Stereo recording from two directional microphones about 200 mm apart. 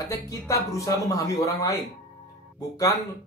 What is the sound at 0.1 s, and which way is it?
Speech, 15° left (ahead or behind).